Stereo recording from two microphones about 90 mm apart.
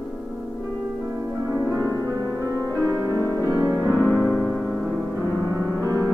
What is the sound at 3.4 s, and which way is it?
Music, 50° right (ahead or behind).